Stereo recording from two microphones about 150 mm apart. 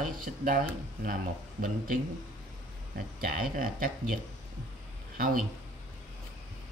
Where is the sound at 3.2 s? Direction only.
70° right (ahead or behind).